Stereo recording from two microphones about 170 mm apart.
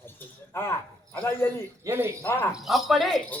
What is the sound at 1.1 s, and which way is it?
Speech, 15° left (ahead or behind).